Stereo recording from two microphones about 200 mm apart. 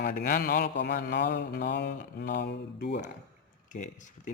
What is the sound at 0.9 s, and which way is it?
Mantra, 50° left (ahead or behind).